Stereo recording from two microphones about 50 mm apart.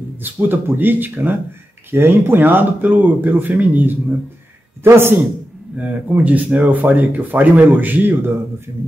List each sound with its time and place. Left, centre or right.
0.2 s speech: right
4.8 s a man's voice: right
5.8 s speech: right